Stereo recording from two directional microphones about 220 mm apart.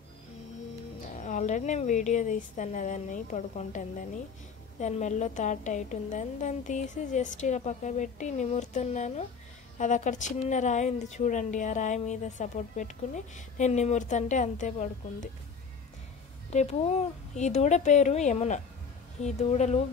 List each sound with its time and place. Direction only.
1.1 s a woman's voice: 35° left (ahead or behind)
16.5 s a woman's voice: 30° left (ahead or behind)